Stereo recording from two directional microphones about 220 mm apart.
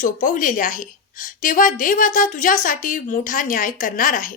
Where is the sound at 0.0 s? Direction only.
35° left (ahead or behind).